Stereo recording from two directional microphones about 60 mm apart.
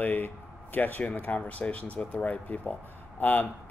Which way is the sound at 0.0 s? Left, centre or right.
Left.